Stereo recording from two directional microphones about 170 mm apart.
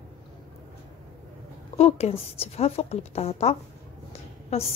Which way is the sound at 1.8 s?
40° left (ahead or behind).